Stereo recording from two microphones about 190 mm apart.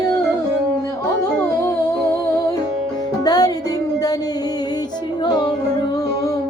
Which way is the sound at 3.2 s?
20° left (ahead or behind).